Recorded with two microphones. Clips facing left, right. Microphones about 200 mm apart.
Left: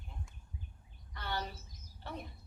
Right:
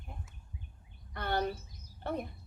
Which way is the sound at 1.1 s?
55° right (ahead or behind).